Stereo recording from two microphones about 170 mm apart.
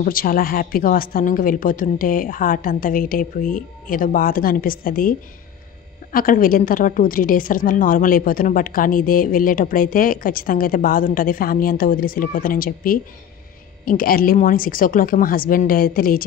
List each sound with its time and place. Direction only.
0.0 s a woman's voice: 55° left (ahead or behind)
6.1 s a woman's voice: 55° left (ahead or behind)